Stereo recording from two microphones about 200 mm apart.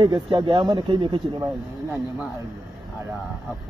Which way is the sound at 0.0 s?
20° right (ahead or behind).